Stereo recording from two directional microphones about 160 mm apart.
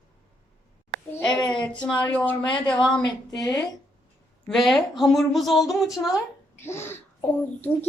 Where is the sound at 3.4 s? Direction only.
20° left (ahead or behind).